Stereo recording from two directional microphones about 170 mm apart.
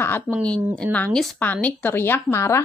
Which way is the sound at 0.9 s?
5° left (ahead or behind).